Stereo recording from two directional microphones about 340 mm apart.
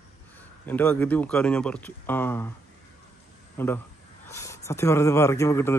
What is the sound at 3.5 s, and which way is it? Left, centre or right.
A man's voice, centre.